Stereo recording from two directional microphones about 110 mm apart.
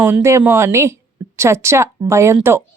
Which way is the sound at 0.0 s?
20° right (ahead or behind).